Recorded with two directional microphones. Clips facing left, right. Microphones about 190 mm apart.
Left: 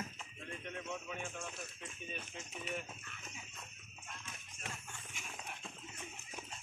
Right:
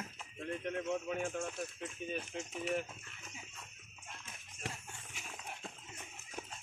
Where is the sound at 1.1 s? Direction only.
50° right (ahead or behind).